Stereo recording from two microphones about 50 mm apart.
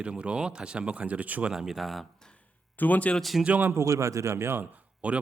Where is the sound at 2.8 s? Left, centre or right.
Left.